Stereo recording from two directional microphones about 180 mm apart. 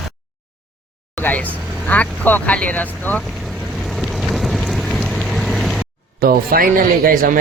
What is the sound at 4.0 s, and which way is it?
Vehicle, centre (ahead or behind).